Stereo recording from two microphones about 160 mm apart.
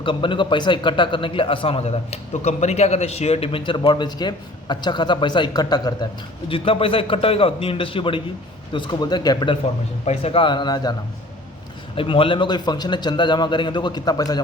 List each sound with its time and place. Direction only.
0.0 s a man's voice: 30° left (ahead or behind)
10.1 s a man's voice: 35° left (ahead or behind)
11.9 s a man's voice: 35° left (ahead or behind)